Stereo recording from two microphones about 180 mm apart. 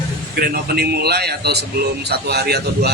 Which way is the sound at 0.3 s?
60° right (ahead or behind).